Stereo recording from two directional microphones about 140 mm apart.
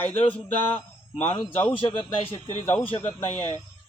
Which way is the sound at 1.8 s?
40° left (ahead or behind).